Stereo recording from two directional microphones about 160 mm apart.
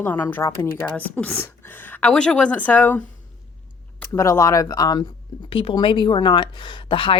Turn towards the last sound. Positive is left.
turn(degrees=35)  # may be behind; listen again after turning